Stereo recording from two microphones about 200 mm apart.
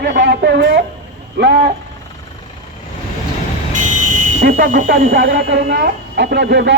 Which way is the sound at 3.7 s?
40° right (ahead or behind).